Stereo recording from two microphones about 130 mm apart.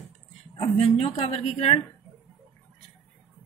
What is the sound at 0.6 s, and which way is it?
A woman's voice, 50° left (ahead or behind).